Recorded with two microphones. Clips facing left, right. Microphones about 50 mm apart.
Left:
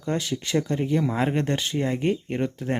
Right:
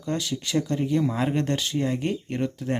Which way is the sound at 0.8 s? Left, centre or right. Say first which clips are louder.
Even; centre.